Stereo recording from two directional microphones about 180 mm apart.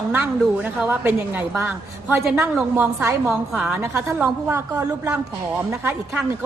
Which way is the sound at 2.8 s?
10° right (ahead or behind).